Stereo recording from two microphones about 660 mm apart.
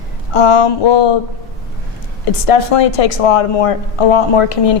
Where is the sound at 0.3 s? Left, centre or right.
Left.